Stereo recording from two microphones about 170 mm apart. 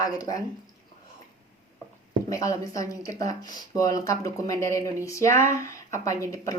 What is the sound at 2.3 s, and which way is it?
Speech, 20° left (ahead or behind).